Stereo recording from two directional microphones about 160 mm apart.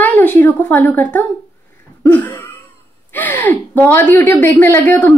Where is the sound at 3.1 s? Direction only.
10° left (ahead or behind).